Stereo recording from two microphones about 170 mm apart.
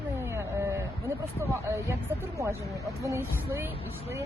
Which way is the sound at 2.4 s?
20° right (ahead or behind).